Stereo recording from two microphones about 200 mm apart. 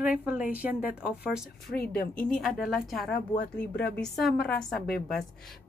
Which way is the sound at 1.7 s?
45° left (ahead or behind).